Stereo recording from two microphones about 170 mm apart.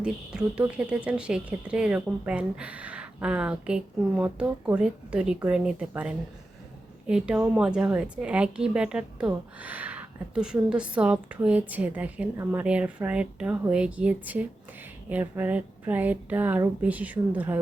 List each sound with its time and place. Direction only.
0.0 s a woman's voice: 5° right (ahead or behind)